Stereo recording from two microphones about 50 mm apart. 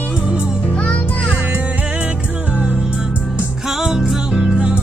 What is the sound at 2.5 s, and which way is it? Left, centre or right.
Music, right.